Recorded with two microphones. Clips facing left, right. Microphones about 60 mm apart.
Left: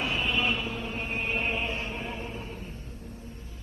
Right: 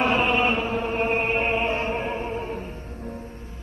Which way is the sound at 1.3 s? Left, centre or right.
Right.